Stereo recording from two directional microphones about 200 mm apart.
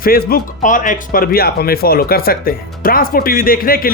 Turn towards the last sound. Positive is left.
turn(degrees=45)  # may be behind; listen again after turning